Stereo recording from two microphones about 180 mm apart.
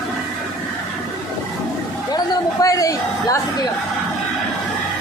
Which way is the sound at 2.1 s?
20° left (ahead or behind).